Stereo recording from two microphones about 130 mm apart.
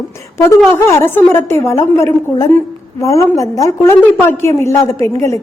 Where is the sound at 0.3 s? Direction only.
20° left (ahead or behind).